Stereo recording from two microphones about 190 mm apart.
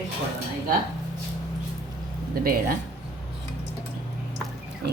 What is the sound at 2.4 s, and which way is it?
Speech, 50° right (ahead or behind).